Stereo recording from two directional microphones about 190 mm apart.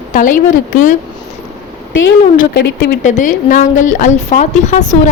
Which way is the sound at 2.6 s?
65° left (ahead or behind).